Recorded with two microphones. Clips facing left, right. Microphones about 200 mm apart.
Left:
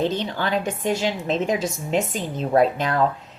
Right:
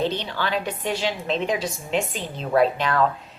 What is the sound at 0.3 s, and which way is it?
A woman's voice, 45° left (ahead or behind).